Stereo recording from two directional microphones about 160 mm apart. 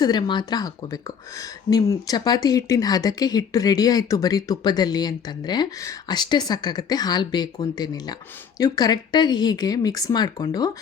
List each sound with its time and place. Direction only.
0.0 s speech: 30° left (ahead or behind)
1.7 s speech: 25° left (ahead or behind)